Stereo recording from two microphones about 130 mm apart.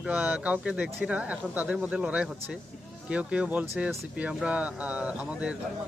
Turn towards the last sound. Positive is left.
turn(degrees=-10)  # may be behind; listen again after turning